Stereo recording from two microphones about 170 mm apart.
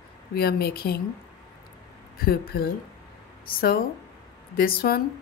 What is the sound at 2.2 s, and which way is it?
Speech, 65° left (ahead or behind).